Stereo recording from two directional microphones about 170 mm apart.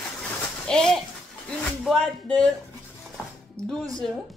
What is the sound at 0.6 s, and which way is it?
Speech, 5° left (ahead or behind).